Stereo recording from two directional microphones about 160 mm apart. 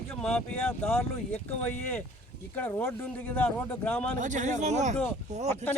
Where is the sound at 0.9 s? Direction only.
10° left (ahead or behind).